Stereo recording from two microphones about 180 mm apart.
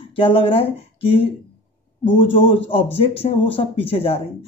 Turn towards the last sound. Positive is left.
turn(degrees=30)  # may be behind; listen again after turning